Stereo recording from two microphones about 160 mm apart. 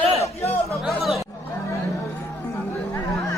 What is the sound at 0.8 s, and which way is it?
Speech, centre (ahead or behind).